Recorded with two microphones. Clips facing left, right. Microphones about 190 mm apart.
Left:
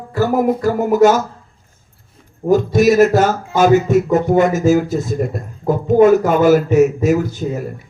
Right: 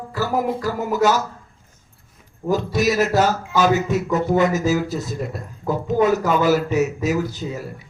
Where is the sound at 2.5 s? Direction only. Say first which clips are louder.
Left 7 dB; 50° left (ahead or behind).